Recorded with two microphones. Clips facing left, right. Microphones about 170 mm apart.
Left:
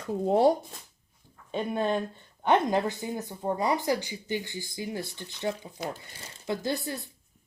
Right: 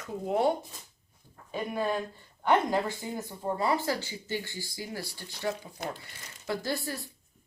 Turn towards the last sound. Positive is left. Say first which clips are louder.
# left 2 dB
turn(degrees=20)  # may be behind; listen again after turning